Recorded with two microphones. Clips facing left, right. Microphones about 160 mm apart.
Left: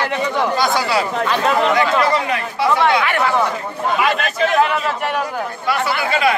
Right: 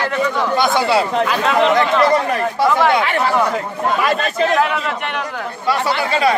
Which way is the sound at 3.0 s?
30° right (ahead or behind).